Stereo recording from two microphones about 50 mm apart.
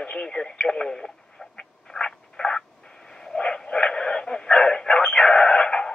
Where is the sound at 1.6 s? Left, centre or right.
Centre.